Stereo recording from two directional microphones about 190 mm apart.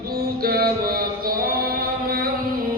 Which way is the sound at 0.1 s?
50° right (ahead or behind).